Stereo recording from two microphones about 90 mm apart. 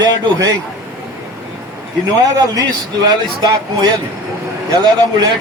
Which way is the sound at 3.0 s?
50° right (ahead or behind).